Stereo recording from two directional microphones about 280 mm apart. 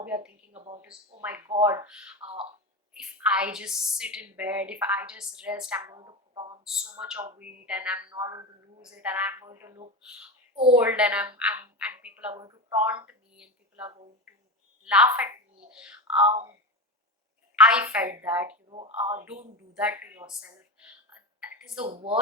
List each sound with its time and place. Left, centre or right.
0.0 s speech: centre
0.5 s a sound: right
1.5 s speech: right
1.9 s a woman's voice: centre
2.2 s speech: right
2.9 s a woman's voice: centre
6.0 s a sound: centre
7.0 s a woman's voice: centre
15.7 s a sound: centre
16.2 s speech: right
17.6 s a woman's voice: centre
21.4 s a sound: centre
21.8 s speech: right